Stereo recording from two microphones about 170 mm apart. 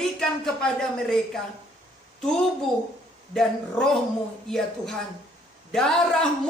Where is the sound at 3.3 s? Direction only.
Centre (ahead or behind).